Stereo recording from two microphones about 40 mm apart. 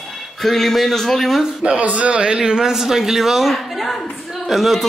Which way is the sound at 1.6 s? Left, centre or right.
Right.